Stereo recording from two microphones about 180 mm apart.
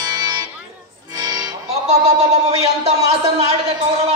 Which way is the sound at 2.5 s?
35° right (ahead or behind).